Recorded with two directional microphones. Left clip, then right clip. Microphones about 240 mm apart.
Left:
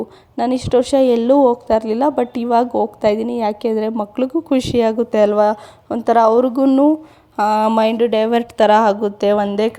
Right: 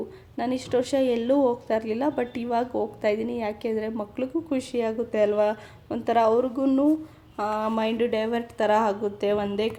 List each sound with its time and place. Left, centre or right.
0.3 s a woman's voice: left